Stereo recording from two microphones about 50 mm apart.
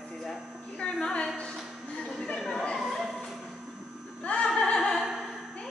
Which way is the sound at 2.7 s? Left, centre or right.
Centre.